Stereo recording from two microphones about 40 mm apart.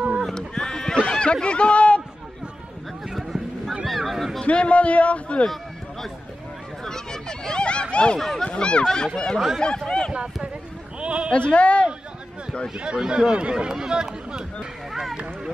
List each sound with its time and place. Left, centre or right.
0.2 s a sound: centre
3.1 s a sound: centre
4.5 s a man's voice: left
6.8 s a sound: centre
8.5 s speech: left
10.1 s speech: right
11.3 s a man's voice: left
12.7 s speech: right
14.9 s run: centre